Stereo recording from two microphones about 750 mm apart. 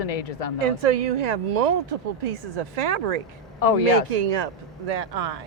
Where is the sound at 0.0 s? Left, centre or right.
Left.